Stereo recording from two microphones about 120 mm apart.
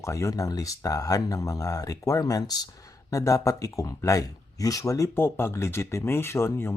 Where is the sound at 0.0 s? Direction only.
25° left (ahead or behind).